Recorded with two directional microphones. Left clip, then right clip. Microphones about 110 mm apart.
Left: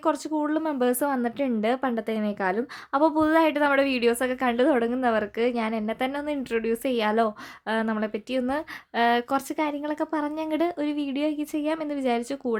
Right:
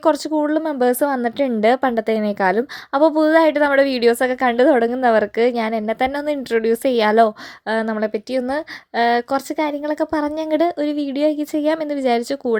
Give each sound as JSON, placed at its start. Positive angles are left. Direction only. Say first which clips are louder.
{"t": 0.0, "sound": "a woman's voice", "louder": "right 8 dB", "side_deg": -35}
{"t": 2.9, "sound": "a woman's voice", "louder": "right 7 dB", "side_deg": -30}